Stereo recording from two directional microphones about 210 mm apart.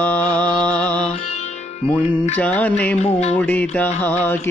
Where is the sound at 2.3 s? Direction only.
5° left (ahead or behind).